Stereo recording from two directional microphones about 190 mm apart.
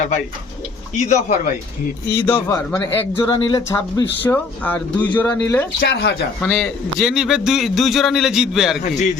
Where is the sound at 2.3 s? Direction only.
10° left (ahead or behind).